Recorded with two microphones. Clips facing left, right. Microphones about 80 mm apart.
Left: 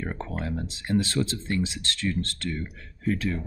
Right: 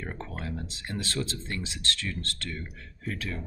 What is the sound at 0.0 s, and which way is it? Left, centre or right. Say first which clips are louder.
Speech: left 5 dB; left.